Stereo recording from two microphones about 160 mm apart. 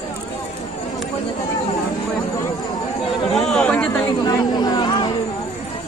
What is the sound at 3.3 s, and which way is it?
Chatter, 5° left (ahead or behind).